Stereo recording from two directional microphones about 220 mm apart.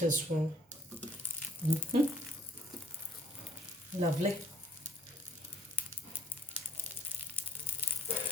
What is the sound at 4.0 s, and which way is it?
Speech, 30° right (ahead or behind).